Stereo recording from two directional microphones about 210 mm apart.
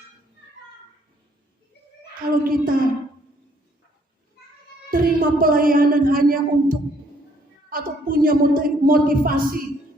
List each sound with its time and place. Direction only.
2.4 s a woman's voice: 45° right (ahead or behind)
4.9 s a woman's voice: 40° right (ahead or behind)